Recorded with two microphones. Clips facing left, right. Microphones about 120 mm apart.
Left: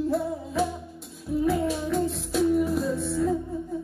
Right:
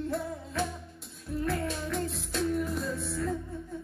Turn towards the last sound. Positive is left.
turn(degrees=0)  # may be behind; listen again after turning